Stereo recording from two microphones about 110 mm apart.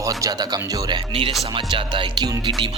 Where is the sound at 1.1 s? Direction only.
60° right (ahead or behind).